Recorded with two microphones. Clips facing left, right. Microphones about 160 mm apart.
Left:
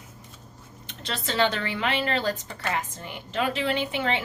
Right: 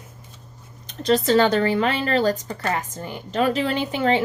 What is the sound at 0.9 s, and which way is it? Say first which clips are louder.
Speech: right 14 dB; 40° right (ahead or behind).